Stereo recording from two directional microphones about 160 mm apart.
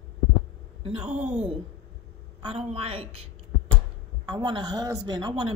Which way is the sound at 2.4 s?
40° right (ahead or behind).